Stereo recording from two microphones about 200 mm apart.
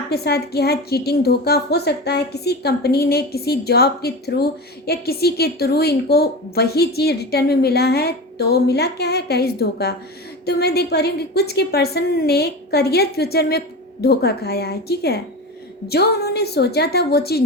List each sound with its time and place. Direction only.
0.1 s a woman's voice: 55° left (ahead or behind)